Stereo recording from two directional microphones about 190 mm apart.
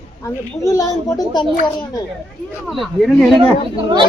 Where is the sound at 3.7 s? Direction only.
25° right (ahead or behind).